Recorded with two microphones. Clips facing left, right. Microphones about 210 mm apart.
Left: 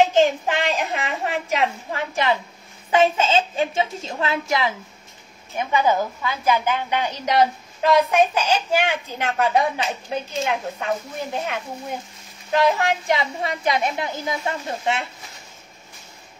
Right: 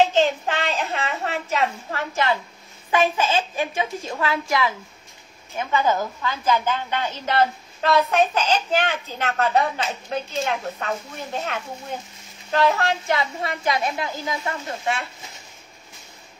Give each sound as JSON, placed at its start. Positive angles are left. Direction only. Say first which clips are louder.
{"t": 0.0, "sound": "a woman's voice", "louder": "left 2 dB", "side_deg": 15}